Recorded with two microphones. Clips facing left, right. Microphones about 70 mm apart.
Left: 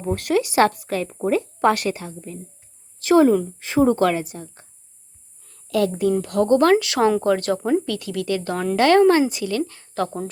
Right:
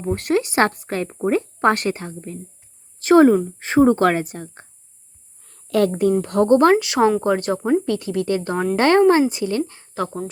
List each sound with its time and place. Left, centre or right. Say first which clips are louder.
0.0 s speech: right 1 dB; right